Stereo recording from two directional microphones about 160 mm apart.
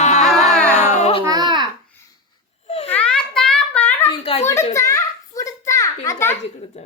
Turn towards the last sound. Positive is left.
turn(degrees=20)  # may be behind; listen again after turning